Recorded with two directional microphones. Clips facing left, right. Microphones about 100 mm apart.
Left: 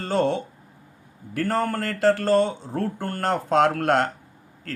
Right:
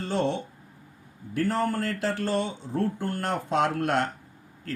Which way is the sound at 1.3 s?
70° left (ahead or behind).